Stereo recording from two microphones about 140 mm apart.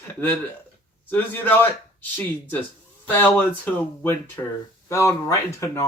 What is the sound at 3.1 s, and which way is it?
Speech, 15° left (ahead or behind).